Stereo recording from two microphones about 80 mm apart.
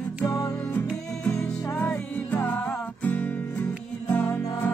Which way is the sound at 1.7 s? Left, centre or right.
Centre.